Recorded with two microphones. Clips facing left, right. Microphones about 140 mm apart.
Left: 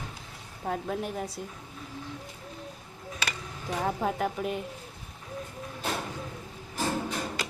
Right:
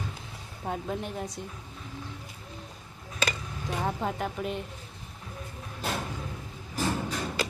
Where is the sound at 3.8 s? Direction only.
Centre (ahead or behind).